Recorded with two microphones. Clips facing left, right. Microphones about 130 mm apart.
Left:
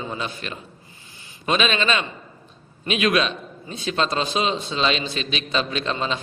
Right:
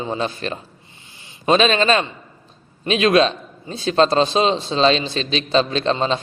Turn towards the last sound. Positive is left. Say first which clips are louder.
# right 6 dB
turn(degrees=-35)  # may be behind; listen again after turning